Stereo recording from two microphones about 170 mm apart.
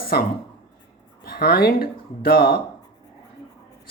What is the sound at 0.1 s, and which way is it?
Speech, 65° left (ahead or behind).